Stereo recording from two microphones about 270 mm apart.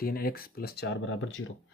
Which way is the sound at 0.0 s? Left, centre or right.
Left.